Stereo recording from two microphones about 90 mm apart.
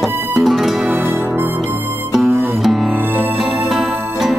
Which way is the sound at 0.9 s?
25° right (ahead or behind).